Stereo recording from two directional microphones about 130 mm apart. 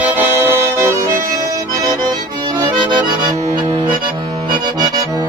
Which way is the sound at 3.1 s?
35° right (ahead or behind).